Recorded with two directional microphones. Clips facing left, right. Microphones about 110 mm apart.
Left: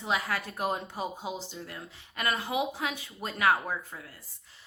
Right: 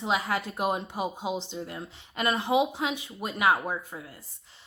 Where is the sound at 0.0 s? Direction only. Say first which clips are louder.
Right 3 dB; 20° right (ahead or behind).